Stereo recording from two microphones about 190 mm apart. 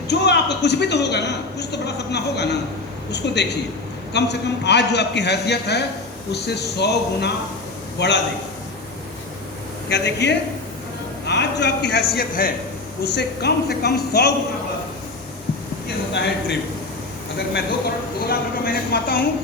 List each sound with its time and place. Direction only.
0.1 s a man's voice: 65° left (ahead or behind)
9.9 s a man's voice: 65° left (ahead or behind)
16.1 s a man's voice: 65° left (ahead or behind)
18.3 s a woman's voice: 50° left (ahead or behind)